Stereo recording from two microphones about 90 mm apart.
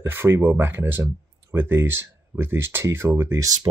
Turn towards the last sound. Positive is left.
turn(degrees=-45)  # may be behind; listen again after turning